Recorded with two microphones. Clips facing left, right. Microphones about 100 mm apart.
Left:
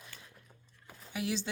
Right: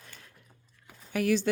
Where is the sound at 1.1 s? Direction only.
55° right (ahead or behind).